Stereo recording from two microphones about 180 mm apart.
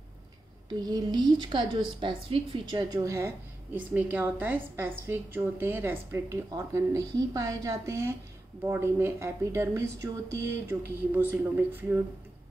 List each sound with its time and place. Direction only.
0.7 s a woman's voice: 20° right (ahead or behind)